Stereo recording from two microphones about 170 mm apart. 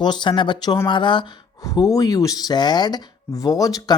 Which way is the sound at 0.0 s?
25° left (ahead or behind).